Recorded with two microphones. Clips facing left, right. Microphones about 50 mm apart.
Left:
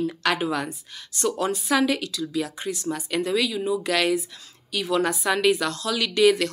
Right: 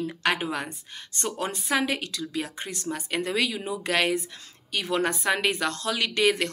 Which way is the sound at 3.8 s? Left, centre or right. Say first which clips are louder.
Right 2 dB; right.